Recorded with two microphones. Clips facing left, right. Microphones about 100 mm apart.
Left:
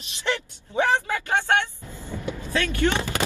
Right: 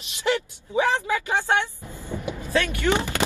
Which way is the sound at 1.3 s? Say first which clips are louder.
Left 3 dB; 15° right (ahead or behind).